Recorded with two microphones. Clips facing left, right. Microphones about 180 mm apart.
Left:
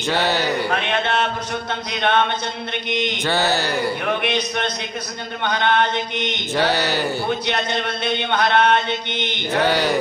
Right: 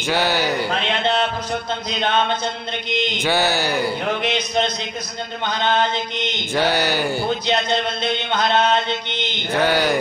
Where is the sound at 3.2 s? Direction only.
Centre (ahead or behind).